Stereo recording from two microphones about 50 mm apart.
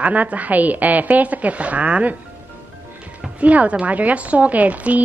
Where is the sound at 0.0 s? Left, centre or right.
Right.